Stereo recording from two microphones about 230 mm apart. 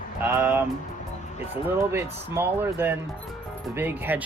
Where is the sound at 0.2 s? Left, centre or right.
Centre.